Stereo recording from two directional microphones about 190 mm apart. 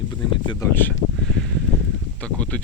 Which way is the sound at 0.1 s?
25° left (ahead or behind).